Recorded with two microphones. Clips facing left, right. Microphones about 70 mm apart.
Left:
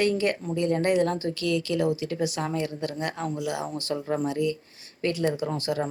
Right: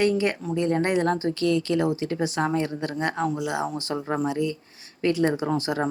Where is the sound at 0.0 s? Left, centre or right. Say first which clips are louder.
Right 2 dB; right.